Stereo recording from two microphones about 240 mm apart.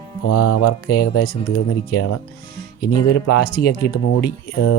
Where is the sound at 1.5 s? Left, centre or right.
Left.